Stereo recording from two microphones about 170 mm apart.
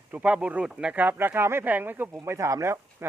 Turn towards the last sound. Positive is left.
turn(degrees=-15)  # may be behind; listen again after turning